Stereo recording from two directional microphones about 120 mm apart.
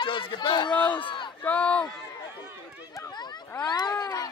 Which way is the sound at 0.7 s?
15° left (ahead or behind).